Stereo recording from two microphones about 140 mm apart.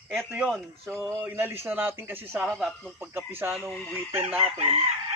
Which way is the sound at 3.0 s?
15° right (ahead or behind).